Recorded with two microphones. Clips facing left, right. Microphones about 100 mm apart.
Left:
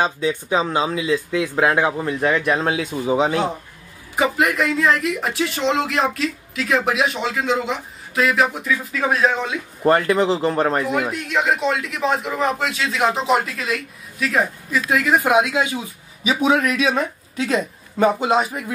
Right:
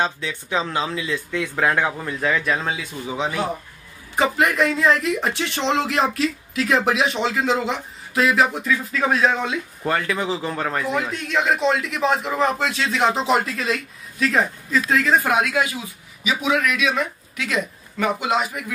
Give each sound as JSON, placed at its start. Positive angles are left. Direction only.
{"t": 0.0, "sound": "speech", "side_deg": 15}
{"t": 4.1, "sound": "speech", "side_deg": 5}
{"t": 9.8, "sound": "speech", "side_deg": 40}
{"t": 10.1, "sound": "speech", "side_deg": 25}
{"t": 10.8, "sound": "speech", "side_deg": 10}
{"t": 14.7, "sound": "speech", "side_deg": 15}
{"t": 16.3, "sound": "speech", "side_deg": 35}